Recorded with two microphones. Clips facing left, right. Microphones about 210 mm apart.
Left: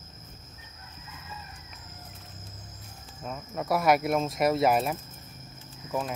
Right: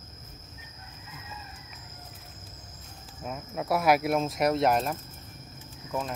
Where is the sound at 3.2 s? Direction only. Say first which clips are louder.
Even; 5° right (ahead or behind).